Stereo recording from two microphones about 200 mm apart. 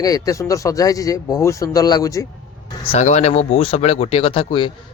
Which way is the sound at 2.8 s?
30° left (ahead or behind).